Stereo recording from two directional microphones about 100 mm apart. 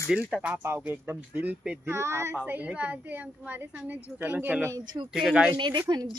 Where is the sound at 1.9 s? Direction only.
25° right (ahead or behind).